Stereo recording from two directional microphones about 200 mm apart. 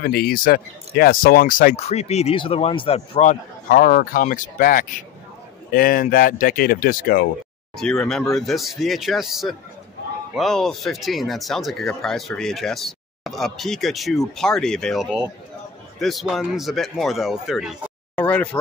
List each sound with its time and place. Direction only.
0.0 s speech: 50° left (ahead or behind)
1.8 s a man's voice: 30° left (ahead or behind)
7.7 s speech: centre (ahead or behind)